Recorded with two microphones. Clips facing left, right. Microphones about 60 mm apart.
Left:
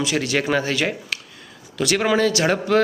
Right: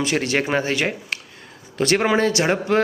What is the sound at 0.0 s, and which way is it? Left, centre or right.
Speech, right.